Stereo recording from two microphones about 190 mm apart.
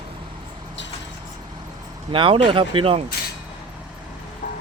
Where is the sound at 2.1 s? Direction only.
30° right (ahead or behind).